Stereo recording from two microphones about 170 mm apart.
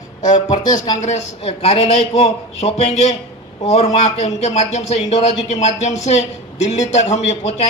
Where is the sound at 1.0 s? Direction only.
40° left (ahead or behind).